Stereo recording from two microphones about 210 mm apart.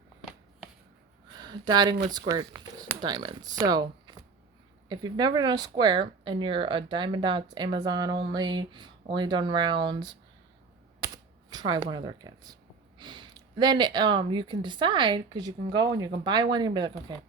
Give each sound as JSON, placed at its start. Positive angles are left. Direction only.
{"t": 1.4, "sound": "speech", "side_deg": -20}